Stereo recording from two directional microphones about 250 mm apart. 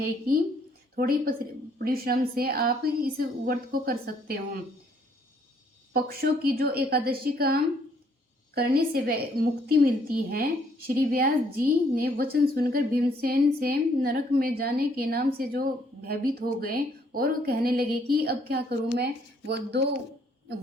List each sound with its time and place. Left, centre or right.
0.9 s a woman's voice: right
5.9 s a woman's voice: right